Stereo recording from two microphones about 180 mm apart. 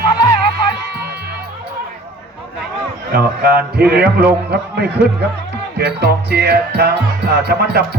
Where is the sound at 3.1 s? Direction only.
60° right (ahead or behind).